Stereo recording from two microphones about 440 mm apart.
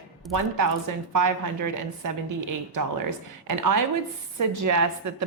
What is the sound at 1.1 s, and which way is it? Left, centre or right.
Speech, right.